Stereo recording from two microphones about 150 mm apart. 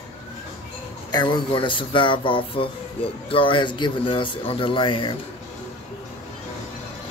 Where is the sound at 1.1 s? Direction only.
30° left (ahead or behind).